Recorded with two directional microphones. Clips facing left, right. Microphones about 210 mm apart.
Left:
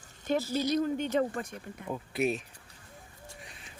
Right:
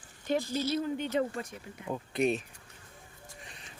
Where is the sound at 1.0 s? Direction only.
50° left (ahead or behind).